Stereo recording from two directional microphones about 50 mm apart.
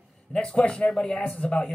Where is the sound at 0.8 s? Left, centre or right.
Centre.